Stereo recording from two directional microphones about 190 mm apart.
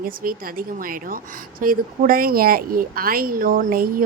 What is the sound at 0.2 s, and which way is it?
A woman's voice, 50° right (ahead or behind).